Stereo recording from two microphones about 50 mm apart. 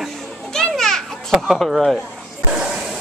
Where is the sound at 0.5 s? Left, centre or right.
Centre.